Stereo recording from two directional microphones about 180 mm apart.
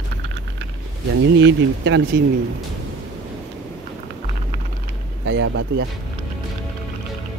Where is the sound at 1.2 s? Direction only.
90° right.